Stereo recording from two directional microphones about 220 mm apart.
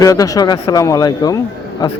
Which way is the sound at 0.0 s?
15° left (ahead or behind).